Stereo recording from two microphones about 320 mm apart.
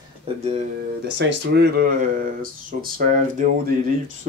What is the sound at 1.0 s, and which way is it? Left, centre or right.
Speech, right.